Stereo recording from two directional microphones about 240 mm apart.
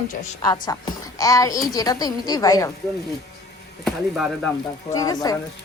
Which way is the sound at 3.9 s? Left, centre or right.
Centre.